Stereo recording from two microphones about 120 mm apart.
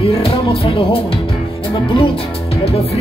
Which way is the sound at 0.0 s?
50° left (ahead or behind).